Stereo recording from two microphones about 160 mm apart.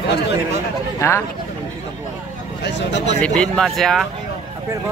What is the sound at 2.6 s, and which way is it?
Speech, 90° left.